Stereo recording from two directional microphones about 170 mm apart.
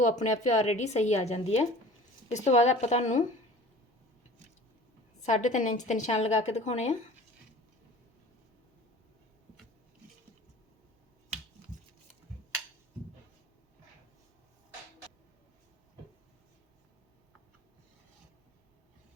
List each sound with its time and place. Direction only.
0.0 s a woman's voice: 45° left (ahead or behind)
5.2 s a woman's voice: 45° left (ahead or behind)